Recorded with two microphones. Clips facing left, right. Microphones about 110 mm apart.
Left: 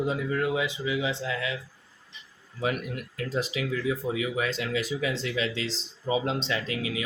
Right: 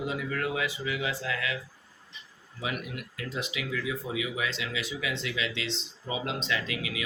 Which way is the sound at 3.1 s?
35° left (ahead or behind).